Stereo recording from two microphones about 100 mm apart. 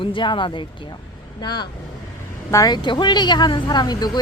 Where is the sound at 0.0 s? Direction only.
55° left (ahead or behind).